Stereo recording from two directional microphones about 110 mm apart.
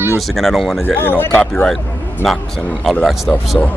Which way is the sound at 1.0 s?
20° left (ahead or behind).